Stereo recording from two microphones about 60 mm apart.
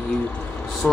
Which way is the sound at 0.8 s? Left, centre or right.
Left.